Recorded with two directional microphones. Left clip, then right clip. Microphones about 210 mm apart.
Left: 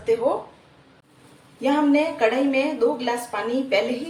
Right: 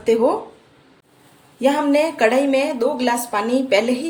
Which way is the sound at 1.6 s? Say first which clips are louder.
Right 3 dB; 55° right (ahead or behind).